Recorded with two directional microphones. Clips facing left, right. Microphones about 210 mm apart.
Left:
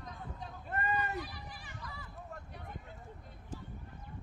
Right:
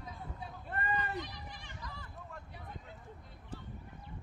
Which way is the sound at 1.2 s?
5° left (ahead or behind).